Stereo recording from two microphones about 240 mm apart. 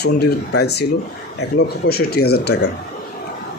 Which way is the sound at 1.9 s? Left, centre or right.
Left.